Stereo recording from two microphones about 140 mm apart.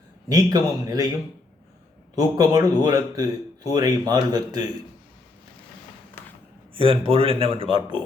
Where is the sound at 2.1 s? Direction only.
25° right (ahead or behind).